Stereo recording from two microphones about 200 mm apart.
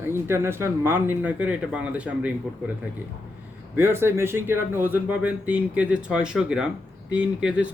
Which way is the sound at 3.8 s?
10° right (ahead or behind).